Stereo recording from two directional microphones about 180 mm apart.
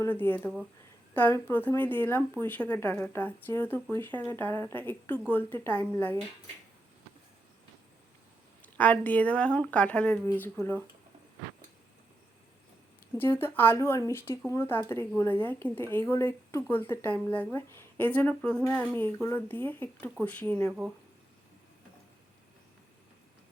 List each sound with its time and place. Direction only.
0.0 s speech: 10° left (ahead or behind)
8.6 s speech: 10° left (ahead or behind)
13.1 s speech: 10° left (ahead or behind)